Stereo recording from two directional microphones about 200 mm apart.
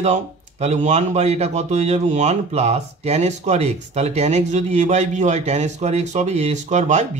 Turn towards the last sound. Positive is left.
turn(degrees=-35)  # may be behind; listen again after turning